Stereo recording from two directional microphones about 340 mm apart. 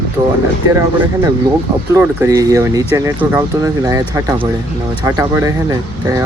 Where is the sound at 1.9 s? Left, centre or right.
Centre.